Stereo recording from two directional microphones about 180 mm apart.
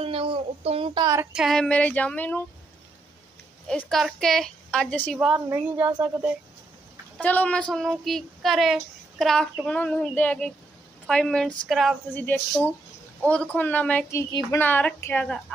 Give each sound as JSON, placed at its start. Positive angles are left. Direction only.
{"t": 0.0, "sound": "a woman's voice", "side_deg": -30}
{"t": 1.3, "sound": "speech", "side_deg": 0}
{"t": 3.6, "sound": "speech", "side_deg": 5}
{"t": 5.1, "sound": "a woman's voice", "side_deg": -5}
{"t": 7.2, "sound": "speech", "side_deg": 10}